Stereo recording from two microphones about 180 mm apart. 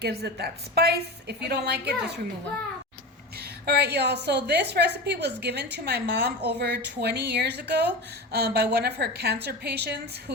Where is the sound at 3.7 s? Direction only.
65° right (ahead or behind).